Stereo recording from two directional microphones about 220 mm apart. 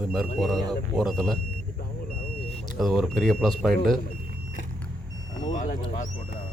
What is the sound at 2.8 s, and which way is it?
Speech, centre (ahead or behind).